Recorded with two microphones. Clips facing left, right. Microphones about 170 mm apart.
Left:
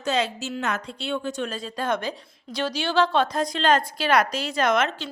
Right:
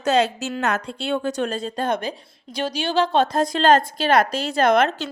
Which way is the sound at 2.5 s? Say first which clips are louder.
Right 1 dB; 15° right (ahead or behind).